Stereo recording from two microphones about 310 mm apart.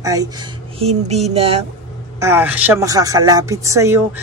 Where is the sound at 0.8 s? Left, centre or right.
Centre.